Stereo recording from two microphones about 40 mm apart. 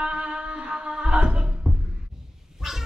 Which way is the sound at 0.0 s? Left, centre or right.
Right.